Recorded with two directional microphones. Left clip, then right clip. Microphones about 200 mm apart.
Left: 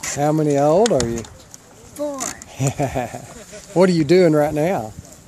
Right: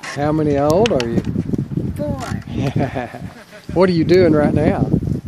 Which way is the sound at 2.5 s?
5° left (ahead or behind).